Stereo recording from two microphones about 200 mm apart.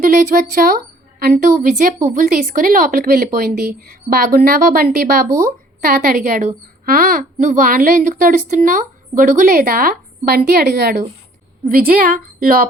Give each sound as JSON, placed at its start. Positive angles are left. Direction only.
{"t": 0.0, "sound": "speech", "side_deg": -40}
{"t": 5.3, "sound": "speech", "side_deg": -15}
{"t": 5.8, "sound": "speech", "side_deg": -45}